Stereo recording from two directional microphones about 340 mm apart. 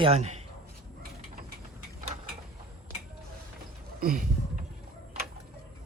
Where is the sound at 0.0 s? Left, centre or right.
Centre.